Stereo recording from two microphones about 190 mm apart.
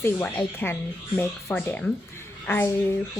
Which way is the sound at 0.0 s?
10° left (ahead or behind).